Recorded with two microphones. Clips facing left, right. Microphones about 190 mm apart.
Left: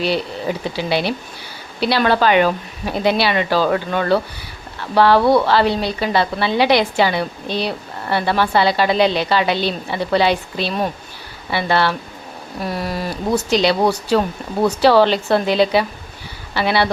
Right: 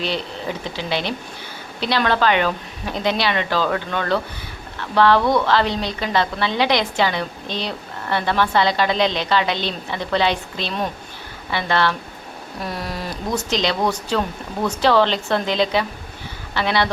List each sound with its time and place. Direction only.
0.0 s a woman's voice: 10° left (ahead or behind)
5.2 s speech: 30° left (ahead or behind)
5.5 s a woman's voice: 10° left (ahead or behind)
12.6 s a sound: 5° left (ahead or behind)
13.3 s a woman's voice: 10° left (ahead or behind)
14.8 s a woman's voice: 10° left (ahead or behind)